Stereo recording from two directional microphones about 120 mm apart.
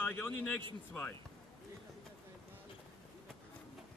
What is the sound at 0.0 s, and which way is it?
Speech, 15° left (ahead or behind).